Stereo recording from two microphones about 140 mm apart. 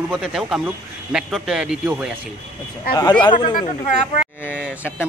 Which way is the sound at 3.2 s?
35° left (ahead or behind).